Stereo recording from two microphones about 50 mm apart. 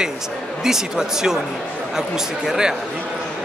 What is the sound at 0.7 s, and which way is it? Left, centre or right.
Speech, centre.